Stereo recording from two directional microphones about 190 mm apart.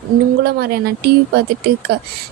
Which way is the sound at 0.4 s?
55° right (ahead or behind).